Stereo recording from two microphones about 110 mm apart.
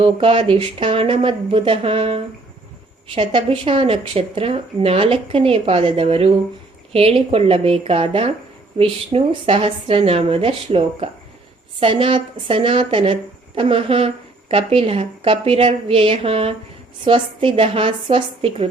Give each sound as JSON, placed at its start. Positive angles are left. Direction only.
{"t": 0.0, "sound": "speech", "side_deg": -55}